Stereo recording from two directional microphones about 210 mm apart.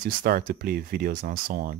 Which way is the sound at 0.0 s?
40° right (ahead or behind).